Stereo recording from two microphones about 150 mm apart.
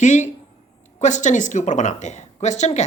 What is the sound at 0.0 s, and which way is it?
Speech, 55° left (ahead or behind).